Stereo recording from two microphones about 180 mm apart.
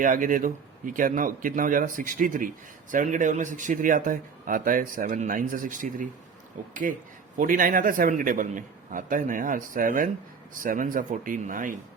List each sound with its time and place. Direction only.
0.0 s speech: 50° right (ahead or behind)